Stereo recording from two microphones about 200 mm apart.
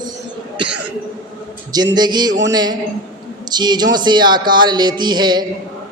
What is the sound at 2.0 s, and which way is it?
Speech, 20° right (ahead or behind).